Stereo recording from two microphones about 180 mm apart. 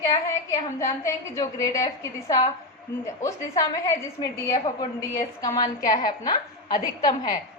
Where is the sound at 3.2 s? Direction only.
15° left (ahead or behind).